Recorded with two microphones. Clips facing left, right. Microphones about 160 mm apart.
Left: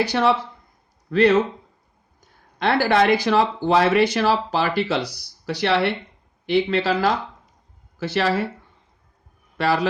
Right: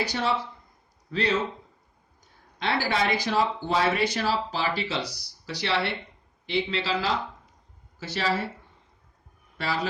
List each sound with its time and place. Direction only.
0.0 s speech: 65° left (ahead or behind)
2.6 s speech: 60° left (ahead or behind)
7.9 s speech: 65° left (ahead or behind)
9.6 s speech: 70° left (ahead or behind)